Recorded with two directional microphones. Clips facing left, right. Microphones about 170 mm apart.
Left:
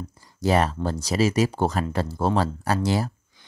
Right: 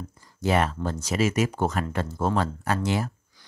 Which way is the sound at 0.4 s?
35° left (ahead or behind).